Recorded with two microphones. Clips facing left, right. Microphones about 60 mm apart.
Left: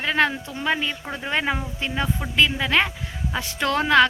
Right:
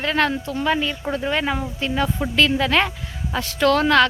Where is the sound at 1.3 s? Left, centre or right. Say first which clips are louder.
Left 1 dB; left.